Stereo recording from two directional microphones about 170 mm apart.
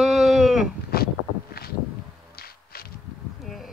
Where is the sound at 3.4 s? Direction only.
Centre (ahead or behind).